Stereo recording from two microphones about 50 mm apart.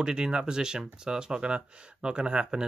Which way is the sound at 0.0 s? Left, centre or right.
Centre.